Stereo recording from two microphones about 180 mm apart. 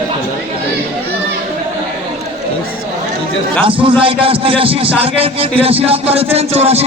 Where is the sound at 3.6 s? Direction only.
30° right (ahead or behind).